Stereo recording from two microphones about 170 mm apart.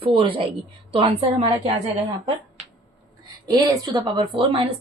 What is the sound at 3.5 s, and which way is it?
A woman's voice, 25° right (ahead or behind).